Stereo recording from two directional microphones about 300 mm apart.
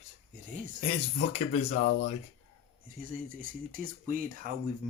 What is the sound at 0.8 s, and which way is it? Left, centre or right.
Speech, centre.